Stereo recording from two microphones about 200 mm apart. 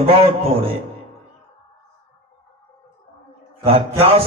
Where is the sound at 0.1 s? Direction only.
30° right (ahead or behind).